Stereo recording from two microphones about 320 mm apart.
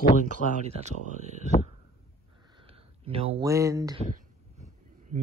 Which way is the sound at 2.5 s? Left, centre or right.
Centre.